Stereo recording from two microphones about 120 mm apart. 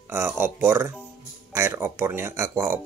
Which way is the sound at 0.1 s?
20° right (ahead or behind).